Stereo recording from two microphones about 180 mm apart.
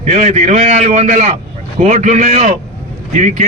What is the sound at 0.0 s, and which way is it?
A man's voice, 40° right (ahead or behind).